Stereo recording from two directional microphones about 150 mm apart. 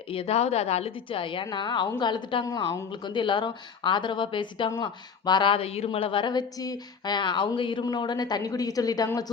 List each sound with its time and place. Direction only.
0.1 s a woman's voice: 40° left (ahead or behind); by 9.2 s 25° left (ahead or behind)